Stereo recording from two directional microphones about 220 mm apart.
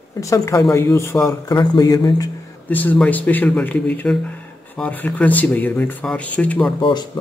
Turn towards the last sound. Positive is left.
turn(degrees=20)  # may be behind; listen again after turning